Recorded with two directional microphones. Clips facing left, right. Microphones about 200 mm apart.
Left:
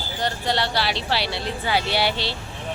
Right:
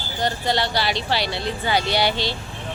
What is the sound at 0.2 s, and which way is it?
Speech, centre (ahead or behind).